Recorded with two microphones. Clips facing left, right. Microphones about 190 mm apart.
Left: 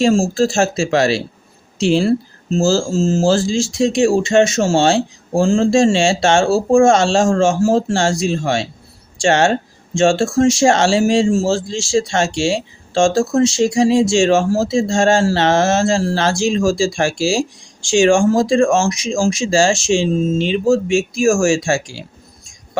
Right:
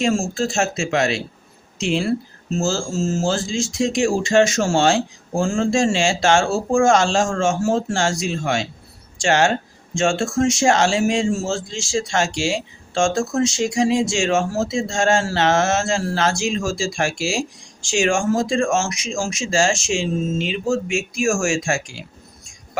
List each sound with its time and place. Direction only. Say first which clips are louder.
0.0 s a man's voice: left 6 dB; 30° left (ahead or behind)